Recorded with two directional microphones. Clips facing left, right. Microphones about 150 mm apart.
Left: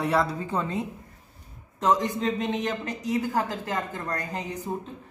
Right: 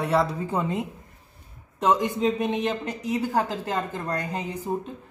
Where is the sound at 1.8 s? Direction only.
20° right (ahead or behind).